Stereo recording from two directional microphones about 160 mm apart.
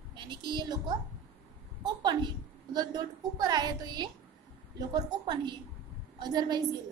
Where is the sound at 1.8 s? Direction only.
25° right (ahead or behind).